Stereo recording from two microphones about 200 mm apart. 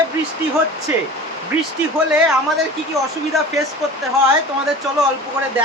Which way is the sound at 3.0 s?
15° right (ahead or behind).